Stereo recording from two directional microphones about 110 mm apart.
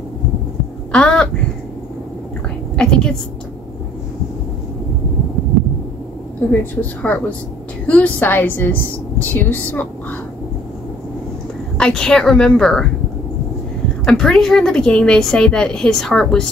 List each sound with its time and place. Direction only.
0.9 s speech: 10° left (ahead or behind)
2.7 s a woman's voice: 10° left (ahead or behind)
6.6 s a woman's voice: 15° left (ahead or behind)
11.8 s a woman's voice: 5° left (ahead or behind)
14.0 s a woman's voice: 5° left (ahead or behind)